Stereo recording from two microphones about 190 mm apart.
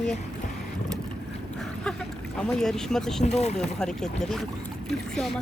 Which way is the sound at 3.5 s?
5° left (ahead or behind).